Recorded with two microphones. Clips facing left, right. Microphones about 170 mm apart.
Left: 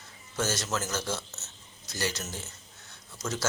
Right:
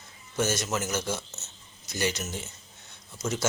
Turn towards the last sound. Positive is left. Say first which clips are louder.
# right 3 dB
turn(degrees=-15)  # may be behind; listen again after turning